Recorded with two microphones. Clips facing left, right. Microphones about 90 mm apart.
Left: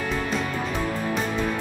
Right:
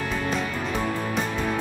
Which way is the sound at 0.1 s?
Centre (ahead or behind).